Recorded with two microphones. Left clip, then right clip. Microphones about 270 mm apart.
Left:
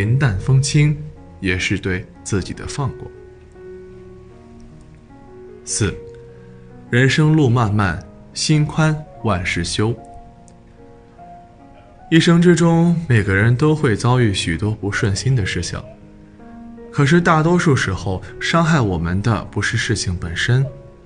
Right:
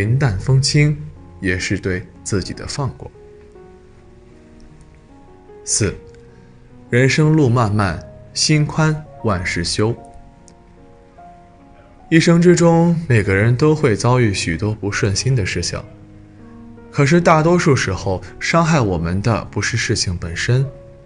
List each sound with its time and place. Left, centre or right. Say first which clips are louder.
0.0 s speech: right 1 dB; centre
5.7 s speech: right 2 dB; centre
12.1 s speech: right 1 dB; centre
16.9 s speech: right 2 dB; centre